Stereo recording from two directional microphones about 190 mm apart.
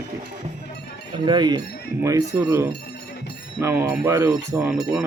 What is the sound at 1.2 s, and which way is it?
Speech, 25° right (ahead or behind).